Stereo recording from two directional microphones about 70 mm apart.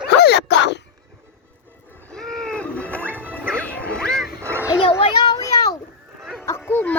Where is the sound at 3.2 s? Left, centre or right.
Left.